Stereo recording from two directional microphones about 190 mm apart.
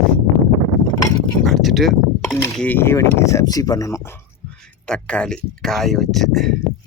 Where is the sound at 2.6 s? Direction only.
10° left (ahead or behind).